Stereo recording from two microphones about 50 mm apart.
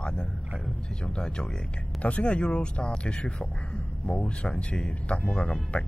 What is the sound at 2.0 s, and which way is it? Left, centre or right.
Speech, left.